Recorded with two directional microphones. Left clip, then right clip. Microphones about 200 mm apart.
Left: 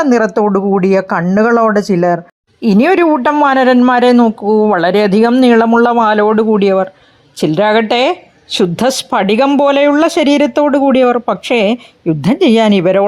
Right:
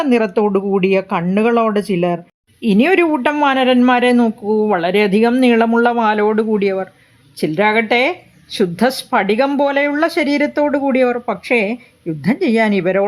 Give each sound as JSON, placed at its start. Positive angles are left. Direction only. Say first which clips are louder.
{"t": 0.3, "sound": "speech", "louder": "left 3 dB", "side_deg": 20}
{"t": 1.6, "sound": "speech", "louder": "left 6 dB", "side_deg": 5}
{"t": 2.1, "sound": "speech", "louder": "left 7 dB", "side_deg": 20}